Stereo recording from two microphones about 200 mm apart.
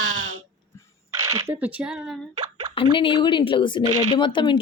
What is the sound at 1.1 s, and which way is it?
Speech, 10° right (ahead or behind).